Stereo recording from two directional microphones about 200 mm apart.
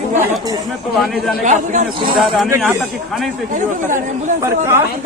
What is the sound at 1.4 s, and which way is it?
Speech, 35° right (ahead or behind).